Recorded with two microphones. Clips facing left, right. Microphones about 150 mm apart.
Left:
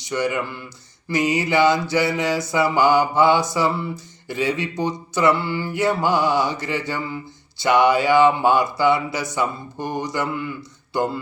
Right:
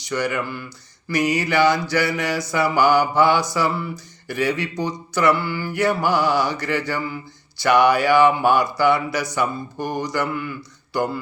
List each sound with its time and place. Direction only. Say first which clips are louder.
0.0 s speech: left 1 dB; 25° left (ahead or behind)